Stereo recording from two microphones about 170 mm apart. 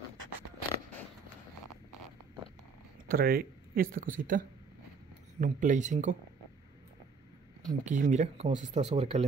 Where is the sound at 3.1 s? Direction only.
60° right (ahead or behind); by 6.1 s 45° right (ahead or behind).